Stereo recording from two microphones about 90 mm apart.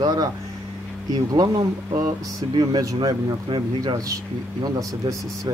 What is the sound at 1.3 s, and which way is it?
Speech, 45° right (ahead or behind).